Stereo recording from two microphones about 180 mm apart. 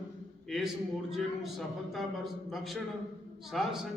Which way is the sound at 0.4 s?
Centre (ahead or behind).